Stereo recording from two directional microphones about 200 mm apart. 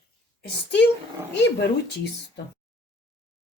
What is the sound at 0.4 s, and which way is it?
Speech, 60° left (ahead or behind).